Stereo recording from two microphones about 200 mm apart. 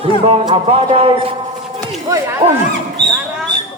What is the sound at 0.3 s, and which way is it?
Speech, 25° right (ahead or behind).